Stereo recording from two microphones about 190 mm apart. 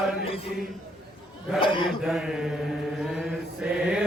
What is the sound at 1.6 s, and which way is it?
Speech, 25° left (ahead or behind).